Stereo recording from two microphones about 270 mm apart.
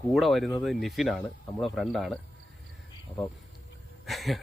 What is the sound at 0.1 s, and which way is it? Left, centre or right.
Speech, centre.